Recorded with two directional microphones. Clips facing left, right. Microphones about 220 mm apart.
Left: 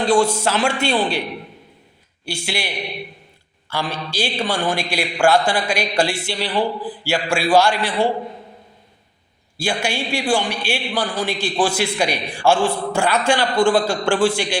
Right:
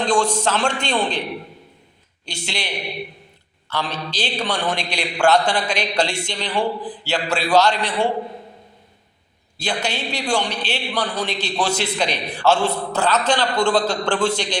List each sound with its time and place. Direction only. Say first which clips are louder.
0.0 s a man's voice: left 3 dB; 10° left (ahead or behind)
2.2 s a man's voice: left 3 dB; 10° left (ahead or behind)
3.7 s a man's voice: left 1 dB; 10° left (ahead or behind)
9.6 s a man's voice: left 2 dB; 10° left (ahead or behind)